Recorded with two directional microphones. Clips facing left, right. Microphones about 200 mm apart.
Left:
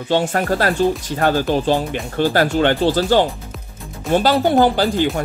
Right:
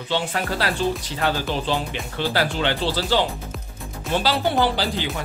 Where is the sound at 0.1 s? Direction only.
45° left (ahead or behind).